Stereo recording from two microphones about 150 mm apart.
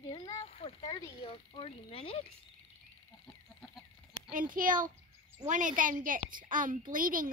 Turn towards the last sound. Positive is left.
turn(degrees=-65)  # may be behind; listen again after turning